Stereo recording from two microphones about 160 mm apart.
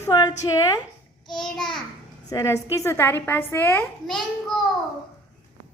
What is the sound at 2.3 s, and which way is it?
A woman's voice, 20° left (ahead or behind).